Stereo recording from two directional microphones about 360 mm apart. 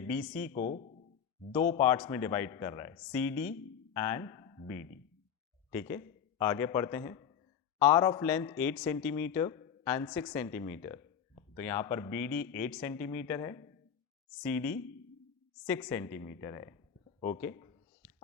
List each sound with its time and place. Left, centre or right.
0.0 s speech: centre
0.3 s speech: left
1.8 s a man's voice: centre